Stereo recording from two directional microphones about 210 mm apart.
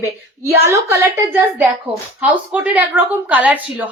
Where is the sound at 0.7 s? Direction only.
10° right (ahead or behind).